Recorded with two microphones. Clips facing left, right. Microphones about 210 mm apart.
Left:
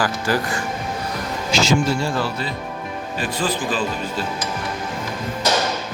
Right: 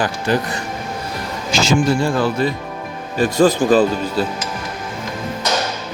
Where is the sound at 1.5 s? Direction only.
50° right (ahead or behind).